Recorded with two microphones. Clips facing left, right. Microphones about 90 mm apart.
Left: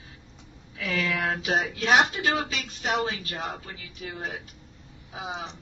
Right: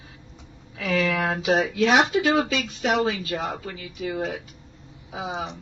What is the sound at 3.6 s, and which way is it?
Speech, 85° right.